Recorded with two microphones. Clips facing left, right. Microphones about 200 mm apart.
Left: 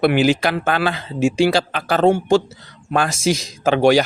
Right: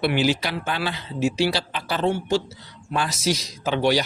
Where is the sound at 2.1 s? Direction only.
50° left (ahead or behind).